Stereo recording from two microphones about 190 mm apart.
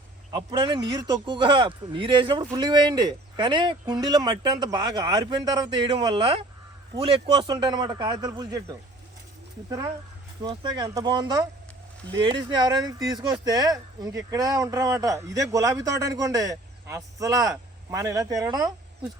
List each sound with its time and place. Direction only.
0.3 s a man's voice: 25° right (ahead or behind)
9.6 s a man's voice: 20° right (ahead or behind)